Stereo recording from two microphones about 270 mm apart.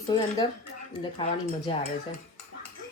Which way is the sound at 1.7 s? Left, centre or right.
Centre.